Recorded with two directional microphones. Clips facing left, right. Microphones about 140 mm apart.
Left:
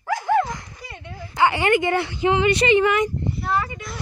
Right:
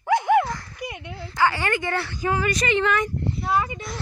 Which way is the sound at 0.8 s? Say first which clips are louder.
Right 5 dB; 15° right (ahead or behind).